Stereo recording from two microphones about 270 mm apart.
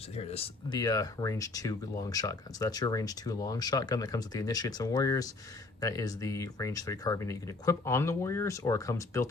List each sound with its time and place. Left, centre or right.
0.2 s speech: left